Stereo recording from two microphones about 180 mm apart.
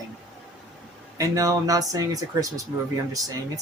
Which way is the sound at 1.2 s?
20° right (ahead or behind).